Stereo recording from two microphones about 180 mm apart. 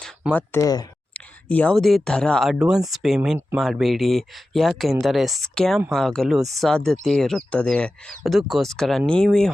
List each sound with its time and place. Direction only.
0.3 s speech: 15° left (ahead or behind)
1.1 s speech: 10° left (ahead or behind)